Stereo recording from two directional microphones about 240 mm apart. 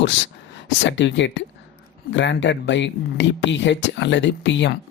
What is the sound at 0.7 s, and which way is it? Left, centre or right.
Speech, left.